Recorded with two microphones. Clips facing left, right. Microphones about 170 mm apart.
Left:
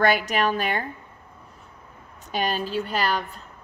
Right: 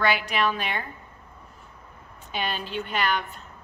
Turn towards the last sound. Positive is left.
turn(degrees=35)  # may be behind; listen again after turning